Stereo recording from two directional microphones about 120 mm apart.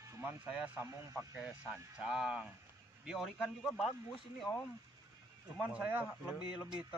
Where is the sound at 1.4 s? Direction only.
10° right (ahead or behind).